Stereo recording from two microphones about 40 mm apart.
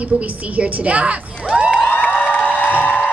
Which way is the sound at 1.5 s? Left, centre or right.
Centre.